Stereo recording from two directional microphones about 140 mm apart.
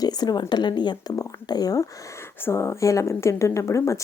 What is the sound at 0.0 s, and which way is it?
A woman's voice, 30° left (ahead or behind).